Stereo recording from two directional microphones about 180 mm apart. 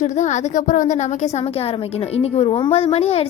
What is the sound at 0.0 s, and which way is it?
A woman's voice, 40° left (ahead or behind).